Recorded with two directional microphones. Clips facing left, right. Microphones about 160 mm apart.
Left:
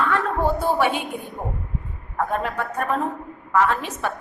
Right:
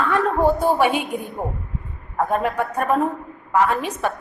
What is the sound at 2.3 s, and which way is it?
Speech, 15° right (ahead or behind).